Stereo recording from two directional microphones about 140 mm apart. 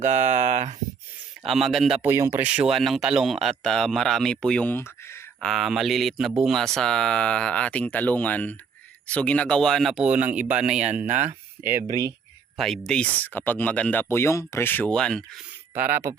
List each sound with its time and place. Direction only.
0.0 s speech: 55° right (ahead or behind)
1.5 s speech: centre (ahead or behind)
2.0 s speech: 20° right (ahead or behind); by 4.9 s 10° left (ahead or behind)
5.4 s speech: centre (ahead or behind); by 11.9 s 15° right (ahead or behind)
12.5 s speech: centre (ahead or behind)
15.7 s speech: 15° right (ahead or behind)